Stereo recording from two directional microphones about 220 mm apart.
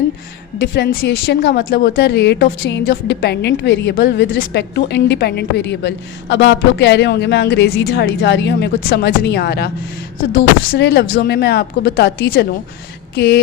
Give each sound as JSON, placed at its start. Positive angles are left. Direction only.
{"t": 0.6, "sound": "a woman's voice", "side_deg": 45}